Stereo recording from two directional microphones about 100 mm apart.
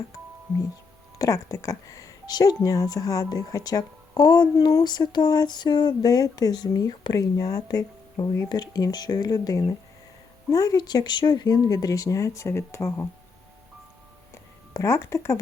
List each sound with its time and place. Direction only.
1.2 s speech: 35° left (ahead or behind)
14.7 s speech: 30° left (ahead or behind)